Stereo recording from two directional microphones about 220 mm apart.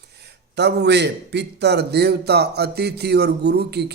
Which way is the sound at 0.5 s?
50° right (ahead or behind).